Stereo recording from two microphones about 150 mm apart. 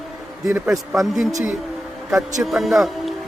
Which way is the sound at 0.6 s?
Centre (ahead or behind).